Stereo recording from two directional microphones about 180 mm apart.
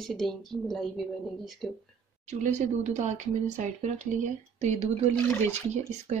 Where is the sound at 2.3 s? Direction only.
40° right (ahead or behind).